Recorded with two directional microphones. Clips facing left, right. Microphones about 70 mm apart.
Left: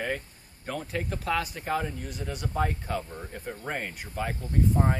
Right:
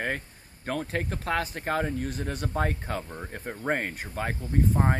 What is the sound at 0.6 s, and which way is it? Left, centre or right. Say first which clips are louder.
Speech: right 3 dB; right.